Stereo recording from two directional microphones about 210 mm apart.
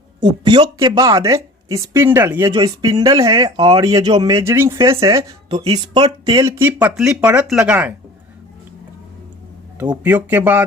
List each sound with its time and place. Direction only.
0.4 s speech: 20° right (ahead or behind)
10.0 s speech: 5° right (ahead or behind)